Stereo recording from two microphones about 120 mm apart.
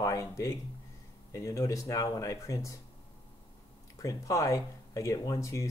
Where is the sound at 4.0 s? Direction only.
25° left (ahead or behind).